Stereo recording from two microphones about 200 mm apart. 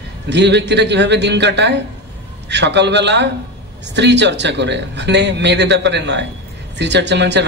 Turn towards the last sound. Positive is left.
turn(degrees=-60)  # may be behind; listen again after turning